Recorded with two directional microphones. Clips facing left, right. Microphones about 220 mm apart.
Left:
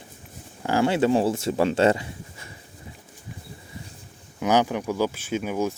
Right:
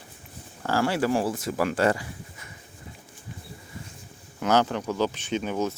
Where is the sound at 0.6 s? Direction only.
15° left (ahead or behind).